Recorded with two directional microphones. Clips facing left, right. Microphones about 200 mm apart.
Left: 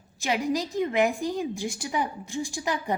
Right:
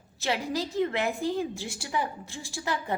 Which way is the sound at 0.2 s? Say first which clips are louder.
Left 3 dB; 15° left (ahead or behind).